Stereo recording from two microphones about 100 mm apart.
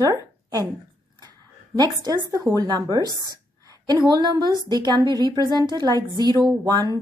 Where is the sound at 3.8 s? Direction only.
45° right (ahead or behind).